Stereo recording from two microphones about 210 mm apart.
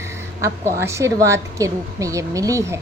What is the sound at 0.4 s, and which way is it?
A woman's voice, 15° right (ahead or behind).